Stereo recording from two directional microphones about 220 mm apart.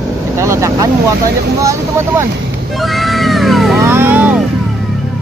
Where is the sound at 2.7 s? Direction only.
Centre (ahead or behind).